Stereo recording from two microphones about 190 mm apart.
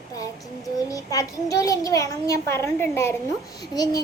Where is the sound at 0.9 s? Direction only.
20° left (ahead or behind).